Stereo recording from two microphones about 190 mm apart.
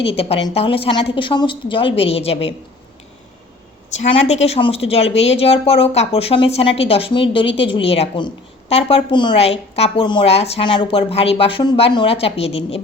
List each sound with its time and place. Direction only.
0.0 s a woman's voice: 30° left (ahead or behind)
3.8 s a woman's voice: 35° left (ahead or behind)